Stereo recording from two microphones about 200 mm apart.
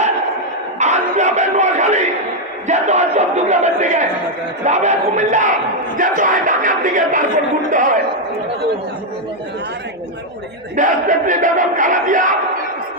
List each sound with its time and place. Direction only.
0.8 s a sound: 35° right (ahead or behind)
4.6 s crowd: 35° right (ahead or behind)
10.8 s crowd: 40° right (ahead or behind)